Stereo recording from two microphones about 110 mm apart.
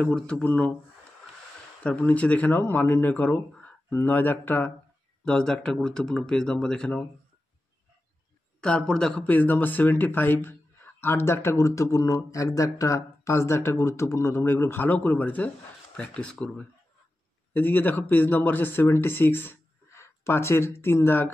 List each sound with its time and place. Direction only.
0.0 s speech: 10° left (ahead or behind)
1.8 s speech: 15° left (ahead or behind)
8.5 s speech: 10° left (ahead or behind)